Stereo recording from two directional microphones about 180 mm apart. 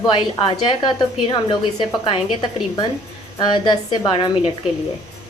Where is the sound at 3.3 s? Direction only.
25° left (ahead or behind).